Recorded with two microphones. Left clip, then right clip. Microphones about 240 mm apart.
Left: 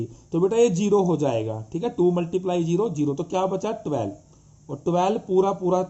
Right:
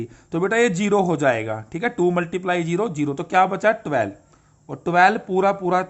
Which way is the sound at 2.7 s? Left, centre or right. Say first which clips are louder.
Right 1 dB; right.